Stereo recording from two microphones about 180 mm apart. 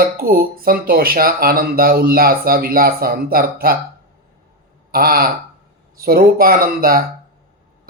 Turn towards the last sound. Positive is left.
turn(degrees=-55)  # may be behind; listen again after turning